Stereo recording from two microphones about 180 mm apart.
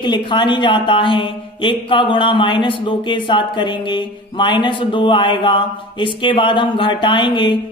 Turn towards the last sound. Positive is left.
turn(degrees=25)  # may be behind; listen again after turning